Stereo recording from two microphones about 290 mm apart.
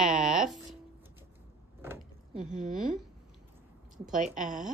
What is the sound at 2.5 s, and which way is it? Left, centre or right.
Speech, right.